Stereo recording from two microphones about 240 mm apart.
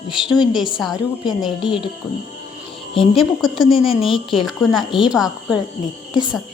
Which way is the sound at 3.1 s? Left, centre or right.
Centre.